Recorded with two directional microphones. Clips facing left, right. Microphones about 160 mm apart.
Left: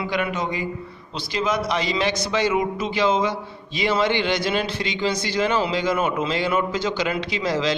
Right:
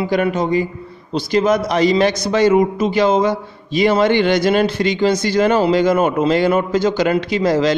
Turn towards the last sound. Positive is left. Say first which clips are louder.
# right 8 dB
turn(degrees=-50)  # may be behind; listen again after turning